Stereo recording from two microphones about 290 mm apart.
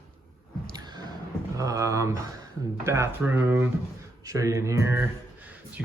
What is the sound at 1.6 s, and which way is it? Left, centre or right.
A man's voice, centre.